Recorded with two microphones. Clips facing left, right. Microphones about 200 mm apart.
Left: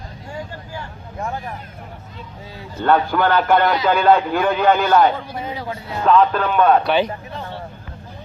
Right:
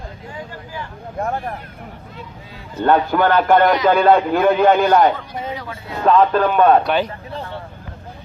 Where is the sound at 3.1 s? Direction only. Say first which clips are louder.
Right 2 dB; 45° right (ahead or behind).